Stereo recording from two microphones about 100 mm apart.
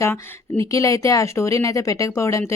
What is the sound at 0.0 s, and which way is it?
Speech, 30° left (ahead or behind).